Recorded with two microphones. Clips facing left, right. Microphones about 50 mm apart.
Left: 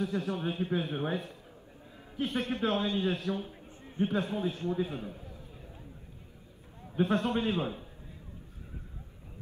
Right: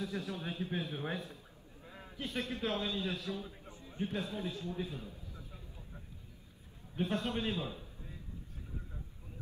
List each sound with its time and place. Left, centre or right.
0.0 s a man's voice: left
6.9 s a man's voice: left